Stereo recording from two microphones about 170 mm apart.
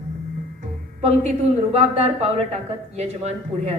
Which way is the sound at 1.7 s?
35° right (ahead or behind).